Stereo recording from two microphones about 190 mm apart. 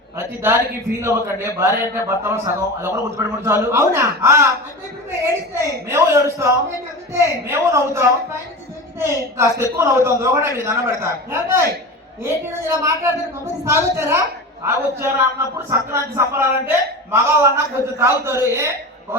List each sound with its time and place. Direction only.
1.0 s a man's voice: 15° right (ahead or behind)